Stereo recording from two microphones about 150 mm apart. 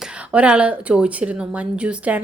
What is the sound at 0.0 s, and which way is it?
A woman's voice, 5° right (ahead or behind).